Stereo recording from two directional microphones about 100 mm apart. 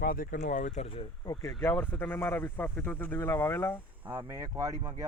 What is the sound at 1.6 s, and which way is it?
Speech, 20° left (ahead or behind).